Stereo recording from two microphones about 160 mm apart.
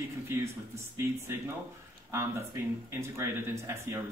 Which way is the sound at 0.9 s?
15° right (ahead or behind).